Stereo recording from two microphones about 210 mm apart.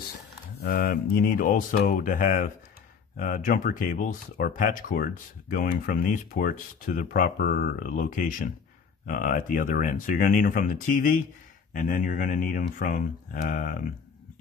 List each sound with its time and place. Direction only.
0.6 s speech: 45° left (ahead or behind)